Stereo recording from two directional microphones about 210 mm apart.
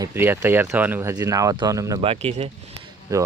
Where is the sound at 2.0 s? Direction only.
30° right (ahead or behind).